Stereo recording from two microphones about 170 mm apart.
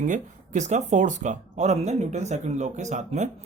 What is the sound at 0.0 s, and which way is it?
Speech, 45° right (ahead or behind).